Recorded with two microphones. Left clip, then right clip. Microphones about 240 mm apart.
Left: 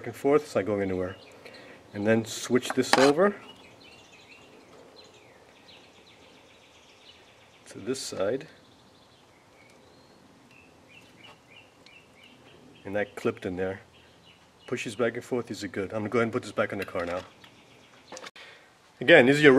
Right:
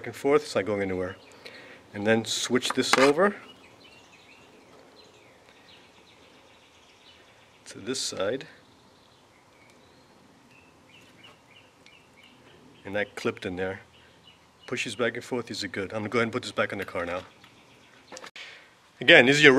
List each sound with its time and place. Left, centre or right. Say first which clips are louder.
0.0 s speech: even; centre
7.6 s speech: right 2 dB; centre
12.8 s speech: even; centre
18.1 s a sound: right 1 dB; centre